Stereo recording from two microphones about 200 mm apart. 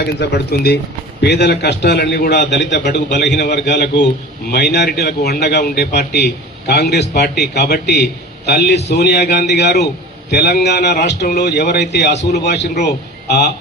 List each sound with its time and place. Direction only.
0.0 s a man's voice: 55° left (ahead or behind)